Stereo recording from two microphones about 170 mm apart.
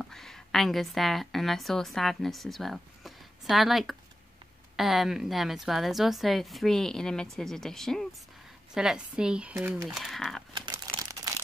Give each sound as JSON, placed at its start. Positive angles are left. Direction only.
{"t": 0.0, "sound": "a woman's voice", "side_deg": 0}
{"t": 9.8, "sound": "a woman's voice", "side_deg": 0}
{"t": 10.5, "sound": "a sound", "side_deg": -25}